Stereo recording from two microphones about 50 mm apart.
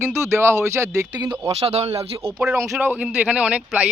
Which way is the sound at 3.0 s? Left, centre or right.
Right.